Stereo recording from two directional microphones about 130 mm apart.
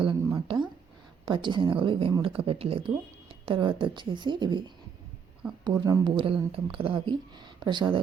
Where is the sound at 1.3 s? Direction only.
40° right (ahead or behind).